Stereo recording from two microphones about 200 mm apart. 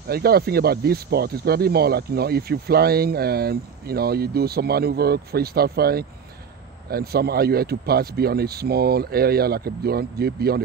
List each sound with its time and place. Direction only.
0.1 s speech: 50° right (ahead or behind)